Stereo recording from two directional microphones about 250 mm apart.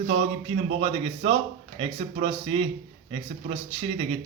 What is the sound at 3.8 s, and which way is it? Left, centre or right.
Speech, right.